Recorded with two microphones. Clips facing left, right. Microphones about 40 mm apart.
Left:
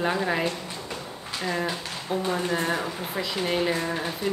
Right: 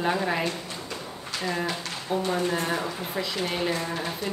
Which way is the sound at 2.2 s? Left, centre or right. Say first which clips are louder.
Even; centre.